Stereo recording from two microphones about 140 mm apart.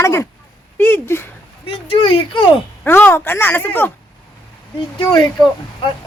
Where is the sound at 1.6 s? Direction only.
40° left (ahead or behind).